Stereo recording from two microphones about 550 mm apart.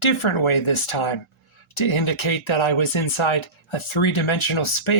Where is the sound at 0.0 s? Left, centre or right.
Left.